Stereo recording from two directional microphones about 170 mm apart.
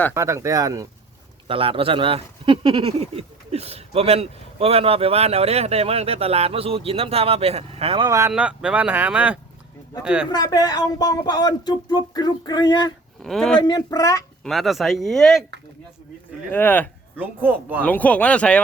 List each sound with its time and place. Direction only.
0.1 s speech: 15° right (ahead or behind)
1.5 s speech: 30° right (ahead or behind)
8.3 s speech: 5° right (ahead or behind)
10.2 s speech: 20° left (ahead or behind)
13.2 s speech: 5° left (ahead or behind)
13.6 s speech: 25° left (ahead or behind)
14.4 s speech: centre (ahead or behind)
16.5 s speech: 10° left (ahead or behind)
17.2 s speech: 10° right (ahead or behind)
17.8 s speech: 10° left (ahead or behind)